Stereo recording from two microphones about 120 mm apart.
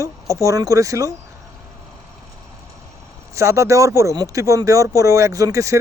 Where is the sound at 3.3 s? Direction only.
25° right (ahead or behind).